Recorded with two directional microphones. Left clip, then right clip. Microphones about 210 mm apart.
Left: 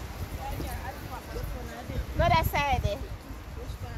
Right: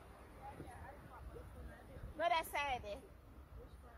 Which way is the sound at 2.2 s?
45° right (ahead or behind).